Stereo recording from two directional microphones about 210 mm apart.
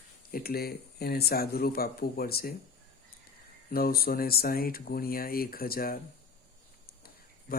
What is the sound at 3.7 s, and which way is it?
Speech, 45° left (ahead or behind).